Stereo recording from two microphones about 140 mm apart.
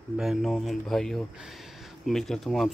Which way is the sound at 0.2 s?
Centre (ahead or behind).